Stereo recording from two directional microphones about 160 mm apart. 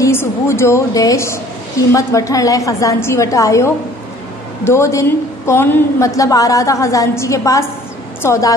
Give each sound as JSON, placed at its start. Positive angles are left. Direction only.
{"t": 0.0, "sound": "a woman's voice", "side_deg": 15}